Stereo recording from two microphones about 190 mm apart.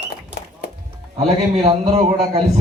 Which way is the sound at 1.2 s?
35° right (ahead or behind).